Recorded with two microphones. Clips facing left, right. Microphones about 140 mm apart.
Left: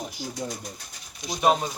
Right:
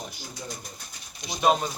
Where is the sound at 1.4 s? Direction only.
10° left (ahead or behind).